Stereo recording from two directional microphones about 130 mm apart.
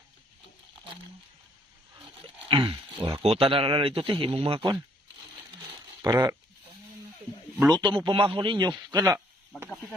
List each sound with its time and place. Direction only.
2.5 s speech: 45° right (ahead or behind)
6.0 s speech: 25° right (ahead or behind)
7.7 s a man's voice: 35° right (ahead or behind)